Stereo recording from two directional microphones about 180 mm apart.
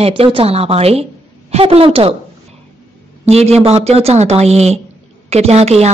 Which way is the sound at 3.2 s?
35° right (ahead or behind).